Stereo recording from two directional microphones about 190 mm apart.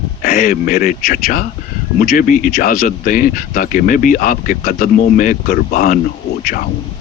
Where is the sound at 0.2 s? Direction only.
50° left (ahead or behind).